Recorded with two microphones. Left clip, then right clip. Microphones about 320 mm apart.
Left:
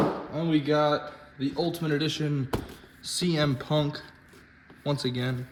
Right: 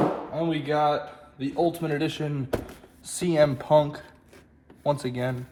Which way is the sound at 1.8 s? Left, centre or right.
Centre.